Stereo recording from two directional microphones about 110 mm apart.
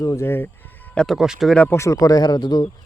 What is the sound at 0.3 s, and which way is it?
Speech, 20° left (ahead or behind).